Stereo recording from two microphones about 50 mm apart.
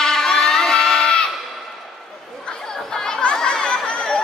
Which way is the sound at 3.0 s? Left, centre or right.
Centre.